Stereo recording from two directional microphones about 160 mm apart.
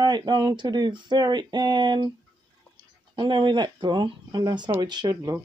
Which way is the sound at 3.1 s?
30° right (ahead or behind).